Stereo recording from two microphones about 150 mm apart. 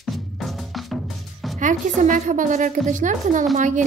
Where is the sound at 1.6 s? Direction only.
55° right (ahead or behind).